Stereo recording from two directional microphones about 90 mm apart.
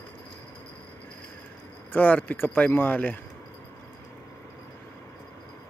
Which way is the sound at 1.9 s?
20° left (ahead or behind).